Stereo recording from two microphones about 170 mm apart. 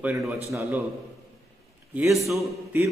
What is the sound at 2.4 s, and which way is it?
Speech, 15° right (ahead or behind).